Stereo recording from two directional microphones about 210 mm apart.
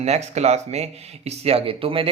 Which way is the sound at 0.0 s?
30° right (ahead or behind).